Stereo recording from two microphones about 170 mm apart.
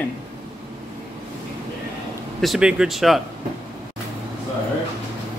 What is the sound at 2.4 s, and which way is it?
Speech, 5° right (ahead or behind).